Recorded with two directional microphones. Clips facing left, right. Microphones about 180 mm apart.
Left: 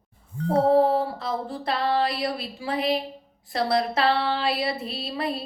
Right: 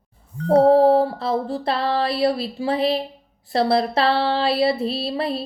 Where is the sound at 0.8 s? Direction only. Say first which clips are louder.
Right 7 dB; 30° right (ahead or behind).